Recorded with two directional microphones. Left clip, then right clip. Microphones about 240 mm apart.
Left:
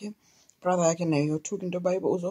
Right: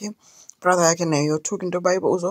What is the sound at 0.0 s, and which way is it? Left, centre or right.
Speech, right.